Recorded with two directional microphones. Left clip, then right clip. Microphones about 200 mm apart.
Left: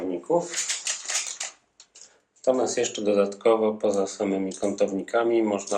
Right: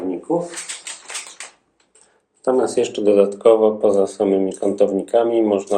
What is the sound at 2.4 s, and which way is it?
Speech, 20° right (ahead or behind).